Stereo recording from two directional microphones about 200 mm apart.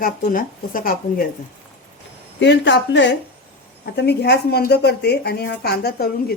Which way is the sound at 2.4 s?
60° left (ahead or behind).